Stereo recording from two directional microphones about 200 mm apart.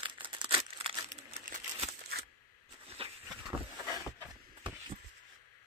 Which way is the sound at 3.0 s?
30° right (ahead or behind).